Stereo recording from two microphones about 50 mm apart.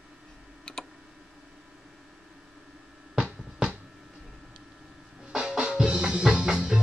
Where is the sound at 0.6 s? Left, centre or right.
Centre.